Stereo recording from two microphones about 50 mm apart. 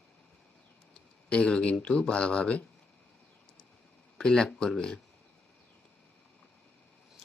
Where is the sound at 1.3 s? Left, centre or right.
Left.